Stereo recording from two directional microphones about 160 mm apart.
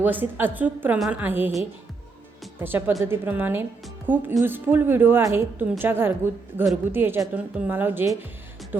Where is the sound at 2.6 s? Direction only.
15° right (ahead or behind).